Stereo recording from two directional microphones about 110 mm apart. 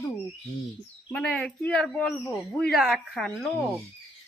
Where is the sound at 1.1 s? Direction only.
10° left (ahead or behind).